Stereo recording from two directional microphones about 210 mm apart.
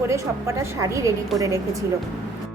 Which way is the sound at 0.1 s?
15° right (ahead or behind).